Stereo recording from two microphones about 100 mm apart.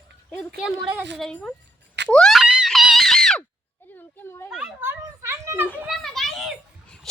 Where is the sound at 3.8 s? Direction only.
20° left (ahead or behind).